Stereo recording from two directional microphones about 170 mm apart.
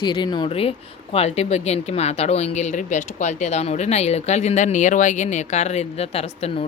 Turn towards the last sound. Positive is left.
turn(degrees=35)  # may be behind; listen again after turning